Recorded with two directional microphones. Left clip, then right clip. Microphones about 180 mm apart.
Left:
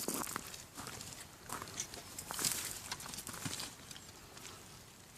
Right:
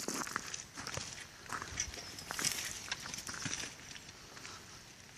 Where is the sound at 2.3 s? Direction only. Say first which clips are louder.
Right 2 dB; 15° right (ahead or behind).